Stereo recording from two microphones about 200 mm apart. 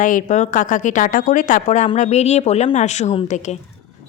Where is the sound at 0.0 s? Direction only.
40° left (ahead or behind).